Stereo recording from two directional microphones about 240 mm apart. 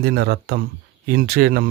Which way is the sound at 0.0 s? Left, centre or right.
Right.